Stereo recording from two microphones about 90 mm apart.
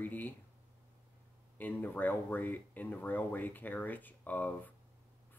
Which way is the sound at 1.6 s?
20° left (ahead or behind).